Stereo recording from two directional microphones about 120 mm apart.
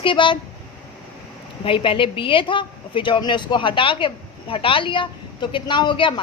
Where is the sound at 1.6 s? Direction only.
45° left (ahead or behind).